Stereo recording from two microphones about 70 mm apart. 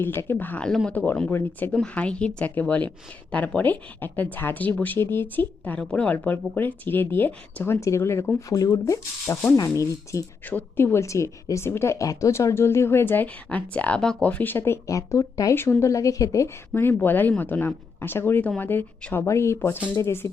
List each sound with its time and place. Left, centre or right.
0.0 s a woman's voice: left
1.3 s a woman's voice: left
1.7 s speech: centre
7.8 s a woman's voice: left
8.4 s speech: left
10.4 s a woman's voice: left
11.0 s a woman's voice: left
14.0 s speech: centre
14.3 s speech: left
15.5 s speech: left
16.7 s speech: left
19.1 s a woman's voice: left